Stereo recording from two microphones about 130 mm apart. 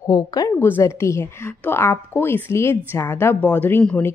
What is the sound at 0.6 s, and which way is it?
A woman's voice, 15° left (ahead or behind).